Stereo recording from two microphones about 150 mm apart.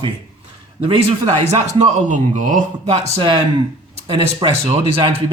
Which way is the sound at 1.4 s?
45° right (ahead or behind).